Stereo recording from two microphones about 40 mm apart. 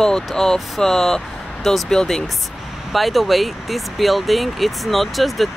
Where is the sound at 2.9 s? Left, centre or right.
Centre.